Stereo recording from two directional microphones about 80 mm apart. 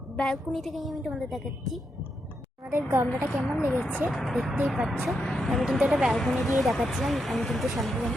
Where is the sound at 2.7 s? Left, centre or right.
Right.